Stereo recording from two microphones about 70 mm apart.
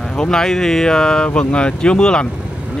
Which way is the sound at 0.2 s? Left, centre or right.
Centre.